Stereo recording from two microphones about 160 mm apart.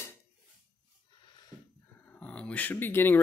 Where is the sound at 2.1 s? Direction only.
5° left (ahead or behind).